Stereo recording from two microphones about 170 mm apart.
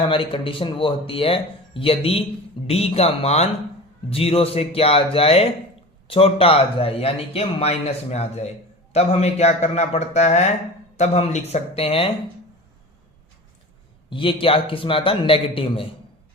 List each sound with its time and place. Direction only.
0.0 s speech: 30° left (ahead or behind)
14.1 s speech: 30° left (ahead or behind)